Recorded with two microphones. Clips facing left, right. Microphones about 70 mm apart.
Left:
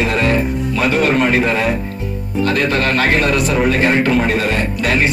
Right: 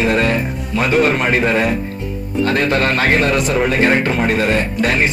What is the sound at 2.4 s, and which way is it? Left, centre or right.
A man's voice, right.